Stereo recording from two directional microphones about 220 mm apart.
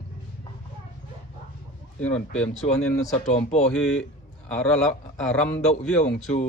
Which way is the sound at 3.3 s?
30° left (ahead or behind).